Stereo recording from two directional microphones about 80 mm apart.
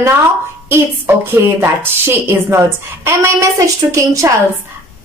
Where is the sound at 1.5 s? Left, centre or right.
Right.